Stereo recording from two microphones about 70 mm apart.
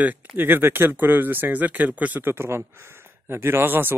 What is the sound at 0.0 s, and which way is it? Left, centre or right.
Speech, right.